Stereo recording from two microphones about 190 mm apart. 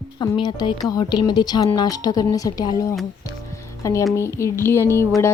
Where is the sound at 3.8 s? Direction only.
15° left (ahead or behind).